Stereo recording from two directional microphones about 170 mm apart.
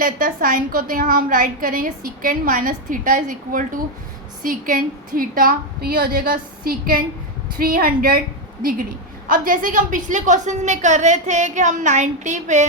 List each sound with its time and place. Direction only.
0.0 s a woman's voice: 55° right (ahead or behind)
9.3 s a woman's voice: 50° right (ahead or behind)